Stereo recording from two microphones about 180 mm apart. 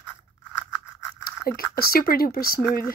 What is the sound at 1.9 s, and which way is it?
Speech, 55° left (ahead or behind).